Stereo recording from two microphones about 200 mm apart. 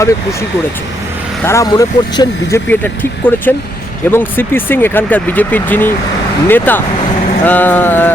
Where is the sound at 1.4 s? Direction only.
15° left (ahead or behind).